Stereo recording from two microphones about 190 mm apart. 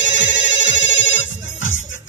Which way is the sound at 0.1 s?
75° left (ahead or behind).